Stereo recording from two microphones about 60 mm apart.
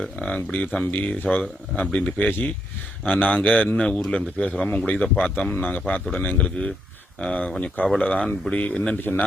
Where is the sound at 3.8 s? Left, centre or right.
Centre.